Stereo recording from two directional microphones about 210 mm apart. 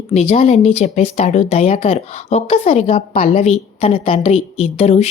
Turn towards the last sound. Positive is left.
turn(degrees=30)  # may be behind; listen again after turning